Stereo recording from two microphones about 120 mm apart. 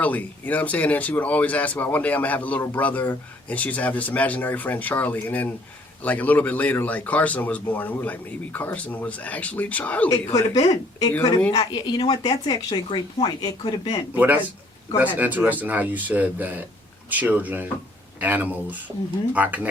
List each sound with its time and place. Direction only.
0.0 s speech: 15° left (ahead or behind)
10.1 s speech: 35° left (ahead or behind)
14.2 s speech: 15° right (ahead or behind)